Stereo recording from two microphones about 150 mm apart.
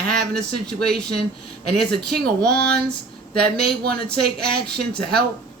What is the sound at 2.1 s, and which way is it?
Speech, 90° right.